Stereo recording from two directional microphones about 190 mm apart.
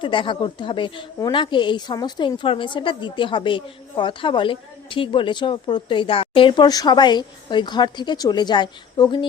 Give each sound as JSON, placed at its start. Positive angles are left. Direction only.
{"t": 0.0, "sound": "a woman's voice", "side_deg": 25}